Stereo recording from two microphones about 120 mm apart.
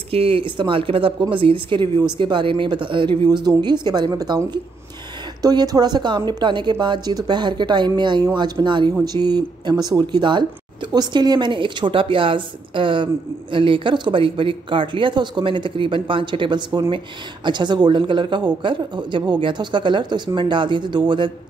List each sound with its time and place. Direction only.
0.1 s a woman's voice: 50° right (ahead or behind)